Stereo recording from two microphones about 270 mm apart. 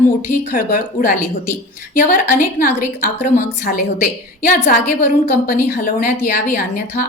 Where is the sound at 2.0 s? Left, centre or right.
Left.